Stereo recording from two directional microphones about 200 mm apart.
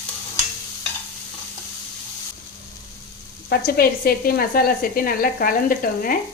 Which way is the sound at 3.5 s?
50° left (ahead or behind).